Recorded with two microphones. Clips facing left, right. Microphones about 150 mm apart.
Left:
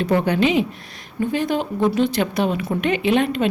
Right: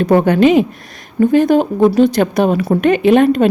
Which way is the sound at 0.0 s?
50° right (ahead or behind).